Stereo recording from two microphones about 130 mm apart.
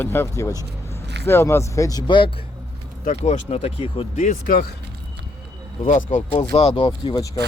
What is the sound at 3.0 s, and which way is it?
Speech, 60° left (ahead or behind).